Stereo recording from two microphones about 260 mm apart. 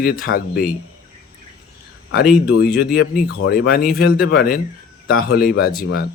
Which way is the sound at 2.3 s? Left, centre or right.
Left.